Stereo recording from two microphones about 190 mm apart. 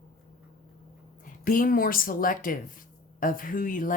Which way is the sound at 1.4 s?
50° left (ahead or behind).